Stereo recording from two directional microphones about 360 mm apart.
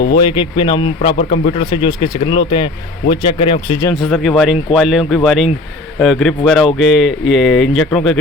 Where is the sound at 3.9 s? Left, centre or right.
Centre.